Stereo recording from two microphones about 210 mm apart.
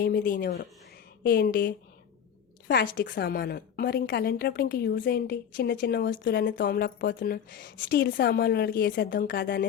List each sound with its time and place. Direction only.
0.0 s a woman's voice: 50° left (ahead or behind)